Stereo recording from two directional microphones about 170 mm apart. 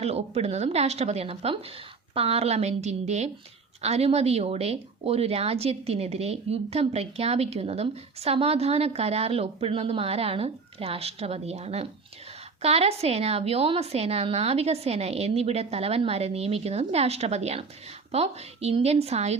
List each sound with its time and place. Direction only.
0.0 s speech: 40° right (ahead or behind)